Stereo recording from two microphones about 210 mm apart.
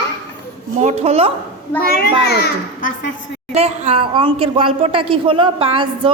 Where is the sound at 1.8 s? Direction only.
45° left (ahead or behind).